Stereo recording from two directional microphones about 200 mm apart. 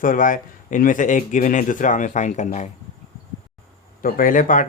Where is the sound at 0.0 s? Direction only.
40° left (ahead or behind).